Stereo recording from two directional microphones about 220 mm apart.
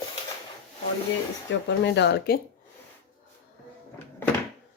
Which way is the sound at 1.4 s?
55° left (ahead or behind).